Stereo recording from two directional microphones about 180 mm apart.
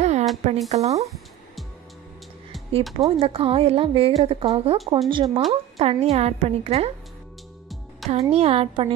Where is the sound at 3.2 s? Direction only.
30° right (ahead or behind).